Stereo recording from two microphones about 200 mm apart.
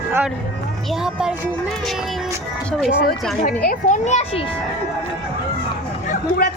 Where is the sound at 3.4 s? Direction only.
45° left (ahead or behind).